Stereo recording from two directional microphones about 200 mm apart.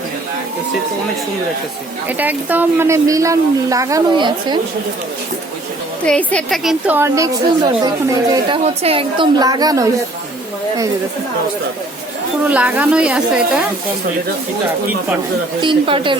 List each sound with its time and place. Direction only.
2.0 s speech: 10° right (ahead or behind)
6.1 s speech: 5° left (ahead or behind); by 8.5 s 20° right (ahead or behind)
8.6 s a woman's voice: 30° right (ahead or behind)
12.5 s a woman's voice: 5° right (ahead or behind)
15.6 s a woman's voice: 25° right (ahead or behind)